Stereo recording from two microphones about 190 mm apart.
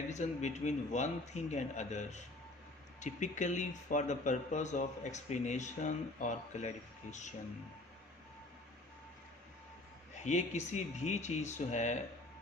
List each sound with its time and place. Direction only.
0.1 s speech: 40° left (ahead or behind)
10.2 s speech: 40° left (ahead or behind)